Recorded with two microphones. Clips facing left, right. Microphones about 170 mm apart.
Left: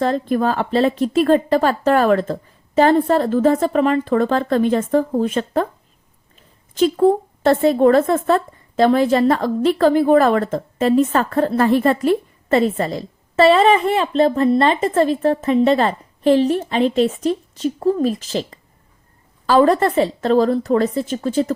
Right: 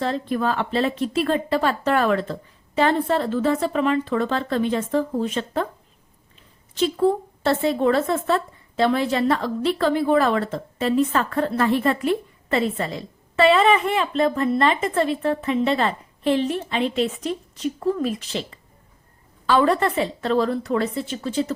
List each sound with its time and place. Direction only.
0.0 s speech: 45° left (ahead or behind)
6.7 s speech: 45° left (ahead or behind)